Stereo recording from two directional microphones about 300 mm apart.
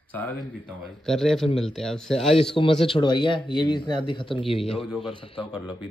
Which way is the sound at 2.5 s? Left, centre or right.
Centre.